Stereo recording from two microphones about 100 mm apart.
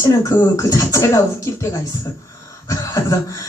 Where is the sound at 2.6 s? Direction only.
30° left (ahead or behind).